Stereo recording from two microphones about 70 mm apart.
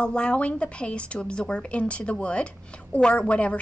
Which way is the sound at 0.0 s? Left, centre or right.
Centre.